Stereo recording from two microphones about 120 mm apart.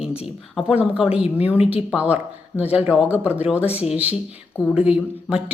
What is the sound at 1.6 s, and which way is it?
Speech, 5° right (ahead or behind).